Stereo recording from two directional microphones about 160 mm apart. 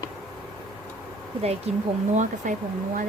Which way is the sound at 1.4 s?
40° right (ahead or behind).